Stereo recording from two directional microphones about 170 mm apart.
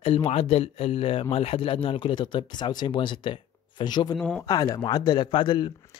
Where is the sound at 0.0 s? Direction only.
35° left (ahead or behind).